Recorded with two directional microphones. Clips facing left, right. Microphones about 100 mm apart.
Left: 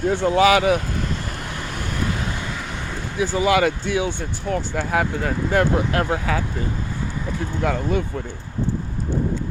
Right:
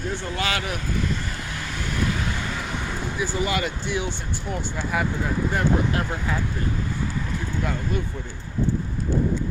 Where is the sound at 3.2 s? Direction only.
90° left.